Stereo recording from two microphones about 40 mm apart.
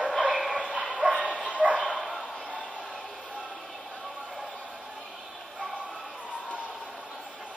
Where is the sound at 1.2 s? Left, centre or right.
Right.